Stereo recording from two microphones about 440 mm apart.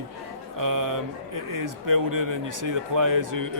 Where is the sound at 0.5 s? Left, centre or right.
Right.